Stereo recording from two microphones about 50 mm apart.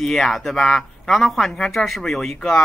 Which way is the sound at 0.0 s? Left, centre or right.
Centre.